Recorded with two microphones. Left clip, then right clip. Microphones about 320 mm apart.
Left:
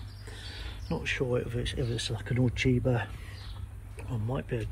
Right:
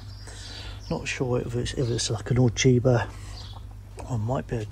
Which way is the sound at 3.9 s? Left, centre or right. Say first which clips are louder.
Right 6 dB; centre.